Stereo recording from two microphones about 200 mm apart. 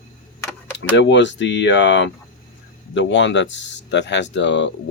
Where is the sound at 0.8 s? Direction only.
65° left (ahead or behind).